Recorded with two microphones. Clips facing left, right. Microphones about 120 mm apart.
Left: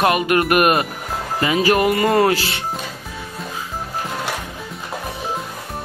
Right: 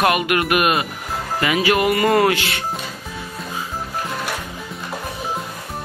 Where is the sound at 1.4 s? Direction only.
35° left (ahead or behind).